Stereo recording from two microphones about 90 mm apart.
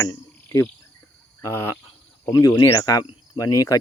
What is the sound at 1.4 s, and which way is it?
Speech, 30° left (ahead or behind).